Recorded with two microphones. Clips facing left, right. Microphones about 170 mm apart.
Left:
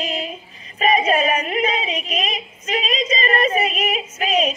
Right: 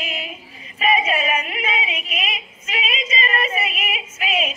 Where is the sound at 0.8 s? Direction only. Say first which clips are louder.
Left 3 dB; 40° left (ahead or behind).